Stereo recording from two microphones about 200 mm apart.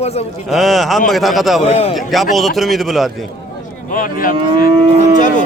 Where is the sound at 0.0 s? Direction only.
30° left (ahead or behind).